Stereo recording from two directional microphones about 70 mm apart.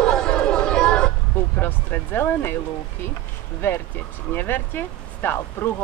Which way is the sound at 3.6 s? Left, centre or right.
Left.